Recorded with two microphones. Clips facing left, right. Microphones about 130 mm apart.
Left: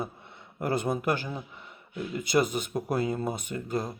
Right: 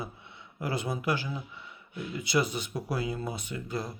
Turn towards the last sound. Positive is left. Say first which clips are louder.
# left 4 dB
turn(degrees=45)  # may be behind; listen again after turning